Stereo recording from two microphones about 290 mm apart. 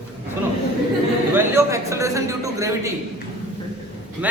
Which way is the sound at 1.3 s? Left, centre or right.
Centre.